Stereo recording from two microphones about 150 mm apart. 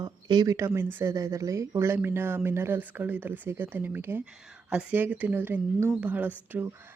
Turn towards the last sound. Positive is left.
turn(degrees=-10)  # may be behind; listen again after turning